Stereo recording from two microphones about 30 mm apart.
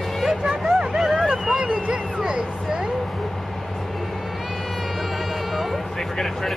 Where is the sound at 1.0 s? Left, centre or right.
Centre.